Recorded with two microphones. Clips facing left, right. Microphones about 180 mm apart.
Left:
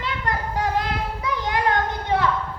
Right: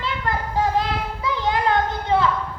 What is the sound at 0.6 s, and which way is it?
Child singing, 25° right (ahead or behind).